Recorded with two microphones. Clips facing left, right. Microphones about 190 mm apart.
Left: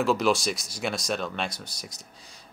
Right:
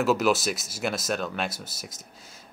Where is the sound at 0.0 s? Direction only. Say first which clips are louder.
Right 1 dB; 5° right (ahead or behind).